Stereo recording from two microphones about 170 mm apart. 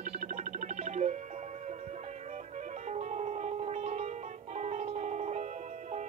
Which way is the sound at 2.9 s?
45° right (ahead or behind).